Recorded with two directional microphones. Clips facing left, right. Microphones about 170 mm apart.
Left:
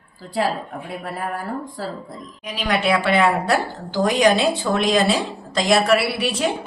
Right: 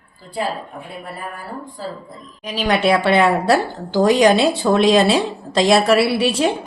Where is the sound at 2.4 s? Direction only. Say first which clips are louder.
Right 4 dB; 35° right (ahead or behind).